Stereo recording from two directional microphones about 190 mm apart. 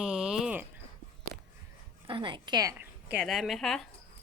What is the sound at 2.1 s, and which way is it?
Speech, 25° right (ahead or behind).